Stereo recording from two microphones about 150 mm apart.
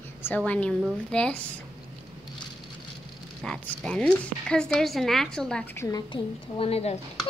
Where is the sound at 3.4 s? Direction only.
5° left (ahead or behind).